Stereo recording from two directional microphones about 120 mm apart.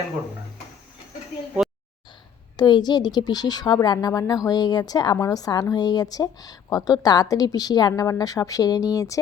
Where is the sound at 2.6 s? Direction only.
40° left (ahead or behind).